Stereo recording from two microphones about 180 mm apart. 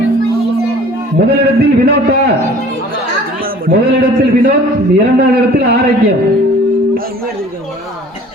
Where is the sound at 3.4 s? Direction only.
55° right (ahead or behind).